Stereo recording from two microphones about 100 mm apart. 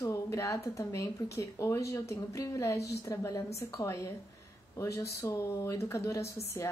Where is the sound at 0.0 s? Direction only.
30° left (ahead or behind).